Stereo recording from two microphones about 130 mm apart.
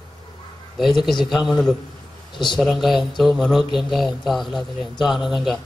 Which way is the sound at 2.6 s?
Centre (ahead or behind).